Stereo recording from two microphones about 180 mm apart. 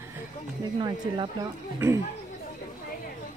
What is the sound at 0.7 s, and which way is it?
Speech, 25° right (ahead or behind).